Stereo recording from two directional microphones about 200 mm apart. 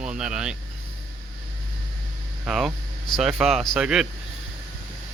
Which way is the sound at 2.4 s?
Centre (ahead or behind).